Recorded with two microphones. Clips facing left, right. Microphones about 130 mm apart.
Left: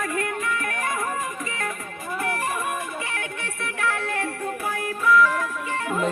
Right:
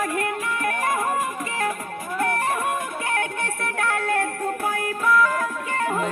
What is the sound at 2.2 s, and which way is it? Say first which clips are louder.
Music: right 4 dB; 55° right (ahead or behind).